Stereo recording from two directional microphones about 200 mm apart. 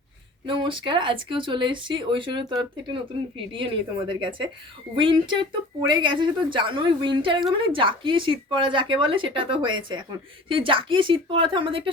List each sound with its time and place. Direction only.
0.4 s speech: 25° right (ahead or behind)